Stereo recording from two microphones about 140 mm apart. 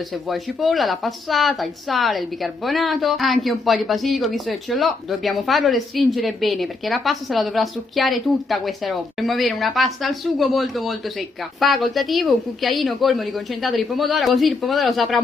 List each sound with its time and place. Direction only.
0.3 s speech: centre (ahead or behind)